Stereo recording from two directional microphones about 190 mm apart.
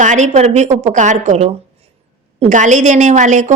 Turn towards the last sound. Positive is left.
turn(degrees=-40)  # may be behind; listen again after turning